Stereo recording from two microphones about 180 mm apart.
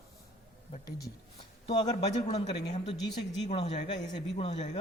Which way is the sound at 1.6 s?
35° left (ahead or behind).